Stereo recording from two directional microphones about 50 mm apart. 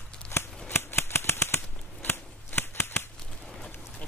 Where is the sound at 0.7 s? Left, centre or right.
Left.